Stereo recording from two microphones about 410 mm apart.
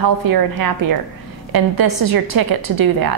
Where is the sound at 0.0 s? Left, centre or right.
Right.